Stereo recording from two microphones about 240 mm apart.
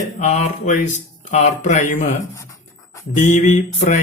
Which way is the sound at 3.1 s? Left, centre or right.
Left.